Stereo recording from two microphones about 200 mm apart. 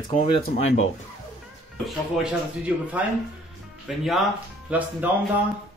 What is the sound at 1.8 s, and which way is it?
Speech, 5° right (ahead or behind).